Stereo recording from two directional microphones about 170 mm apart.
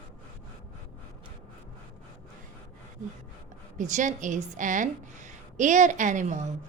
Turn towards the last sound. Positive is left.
turn(degrees=-45)  # may be behind; listen again after turning